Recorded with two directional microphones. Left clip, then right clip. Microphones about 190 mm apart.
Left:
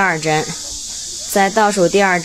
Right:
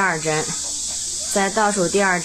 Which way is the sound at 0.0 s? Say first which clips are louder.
Left 4 dB; 35° left (ahead or behind).